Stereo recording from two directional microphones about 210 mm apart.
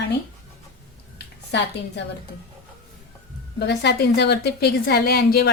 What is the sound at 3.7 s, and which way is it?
A woman's voice, 55° left (ahead or behind).